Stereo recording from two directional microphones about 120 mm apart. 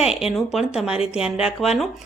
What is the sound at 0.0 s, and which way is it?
Speech, 5° right (ahead or behind).